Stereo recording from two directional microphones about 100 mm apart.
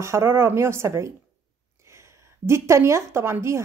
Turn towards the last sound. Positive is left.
turn(degrees=-25)  # may be behind; listen again after turning